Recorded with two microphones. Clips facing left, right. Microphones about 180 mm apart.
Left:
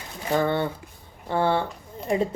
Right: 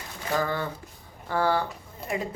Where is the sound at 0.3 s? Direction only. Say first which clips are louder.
Left 5 dB; 25° left (ahead or behind).